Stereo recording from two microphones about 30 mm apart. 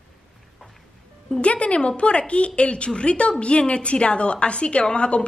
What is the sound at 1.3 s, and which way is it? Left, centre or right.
A woman's voice, left.